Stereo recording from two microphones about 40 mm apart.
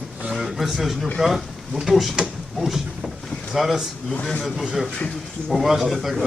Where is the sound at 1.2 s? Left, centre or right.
Centre.